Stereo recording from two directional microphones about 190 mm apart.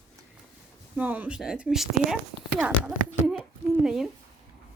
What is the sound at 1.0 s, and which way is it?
Speech, 10° right (ahead or behind).